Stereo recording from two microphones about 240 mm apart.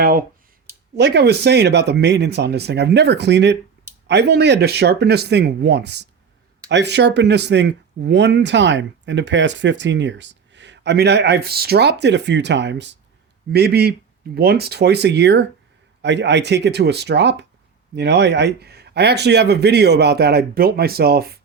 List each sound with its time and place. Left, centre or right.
0.0 s speech: right